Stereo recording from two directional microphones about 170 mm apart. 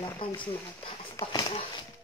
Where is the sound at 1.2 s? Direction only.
30° left (ahead or behind).